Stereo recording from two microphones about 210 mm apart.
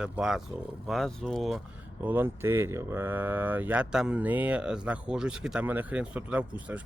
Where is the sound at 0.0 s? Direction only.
5° right (ahead or behind).